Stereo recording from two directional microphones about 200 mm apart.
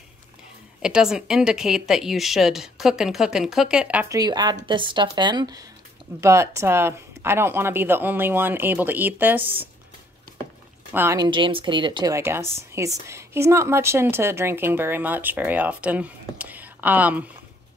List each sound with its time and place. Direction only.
0.8 s a woman's voice: 5° right (ahead or behind)
10.9 s a woman's voice: 10° right (ahead or behind)
11.2 s a woman's voice: 25° right (ahead or behind); by 17.2 s 10° right (ahead or behind)